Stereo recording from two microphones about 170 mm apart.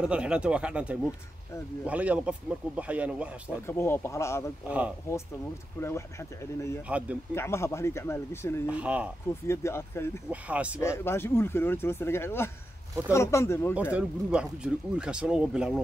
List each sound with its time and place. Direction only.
0.0 s speech: 5° right (ahead or behind)
3.6 s speech: 15° left (ahead or behind)
4.6 s speech: 10° right (ahead or behind)
5.8 s speech: 15° left (ahead or behind)
6.9 s speech: 10° right (ahead or behind)
7.3 s speech: 15° left (ahead or behind)
8.6 s speech: 10° right (ahead or behind)
9.5 s speech: 15° left (ahead or behind)
10.3 s speech: 10° right (ahead or behind)
10.8 s speech: 15° left (ahead or behind)
13.9 s speech: 5° right (ahead or behind)